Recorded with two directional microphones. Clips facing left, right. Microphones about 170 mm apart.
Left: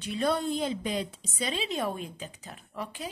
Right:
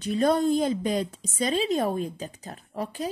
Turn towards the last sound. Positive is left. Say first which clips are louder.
# right 6 dB
turn(degrees=-40)  # may be behind; listen again after turning